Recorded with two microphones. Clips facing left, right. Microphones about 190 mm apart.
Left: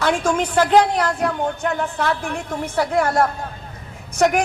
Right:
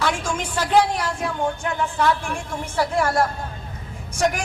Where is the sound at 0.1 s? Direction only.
60° left (ahead or behind).